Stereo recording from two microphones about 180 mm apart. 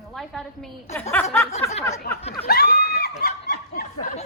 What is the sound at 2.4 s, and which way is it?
Snicker, 60° left (ahead or behind).